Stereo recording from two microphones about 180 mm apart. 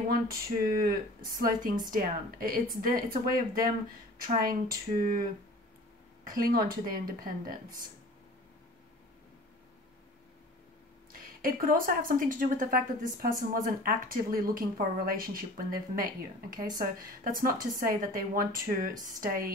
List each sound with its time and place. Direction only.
0.1 s a woman's voice: 55° right (ahead or behind)
5.0 s a woman's voice: 50° right (ahead or behind)
11.1 s a woman's voice: 50° right (ahead or behind)